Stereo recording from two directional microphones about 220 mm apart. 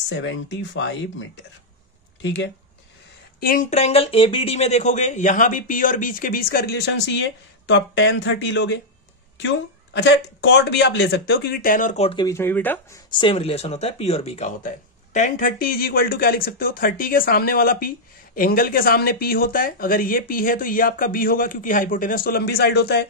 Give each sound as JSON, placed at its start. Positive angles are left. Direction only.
{"t": 0.1, "sound": "speech", "side_deg": 55}
{"t": 2.2, "sound": "speech", "side_deg": 55}
{"t": 3.3, "sound": "speech", "side_deg": 40}
{"t": 10.0, "sound": "speech", "side_deg": 55}
{"t": 13.2, "sound": "speech", "side_deg": 25}